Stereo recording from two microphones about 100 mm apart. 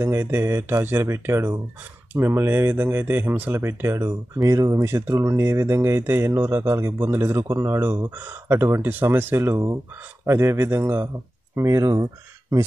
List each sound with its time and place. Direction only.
0.0 s speech: 25° right (ahead or behind)